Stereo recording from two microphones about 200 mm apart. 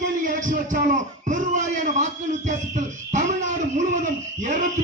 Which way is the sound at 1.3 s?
40° right (ahead or behind).